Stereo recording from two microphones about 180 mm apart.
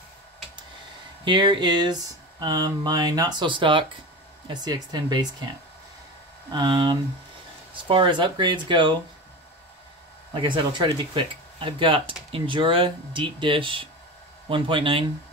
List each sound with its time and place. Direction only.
1.2 s speech: 25° right (ahead or behind)
6.5 s speech: 25° right (ahead or behind)
10.3 s speech: 25° right (ahead or behind)